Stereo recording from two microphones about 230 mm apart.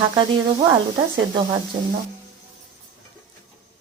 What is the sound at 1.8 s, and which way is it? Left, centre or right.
Speech, centre.